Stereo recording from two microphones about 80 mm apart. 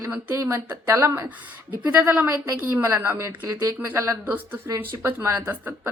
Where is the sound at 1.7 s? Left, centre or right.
Right.